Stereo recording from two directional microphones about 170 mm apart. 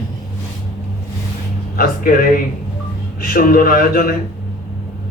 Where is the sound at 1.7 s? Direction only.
60° left (ahead or behind).